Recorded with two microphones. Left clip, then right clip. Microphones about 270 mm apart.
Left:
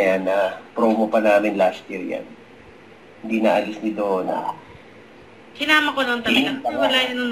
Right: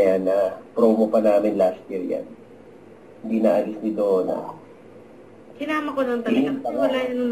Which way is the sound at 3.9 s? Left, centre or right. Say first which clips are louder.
Right 2 dB; centre.